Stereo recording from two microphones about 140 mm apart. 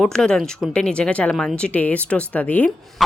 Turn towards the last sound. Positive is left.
turn(degrees=0)  # may be behind; listen again after turning